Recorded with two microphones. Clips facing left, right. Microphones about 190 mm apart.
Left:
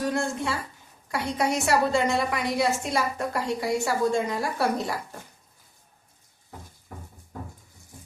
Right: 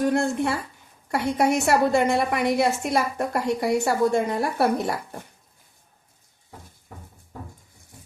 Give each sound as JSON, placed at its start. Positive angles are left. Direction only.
{"t": 0.0, "sound": "a woman's voice", "side_deg": -60}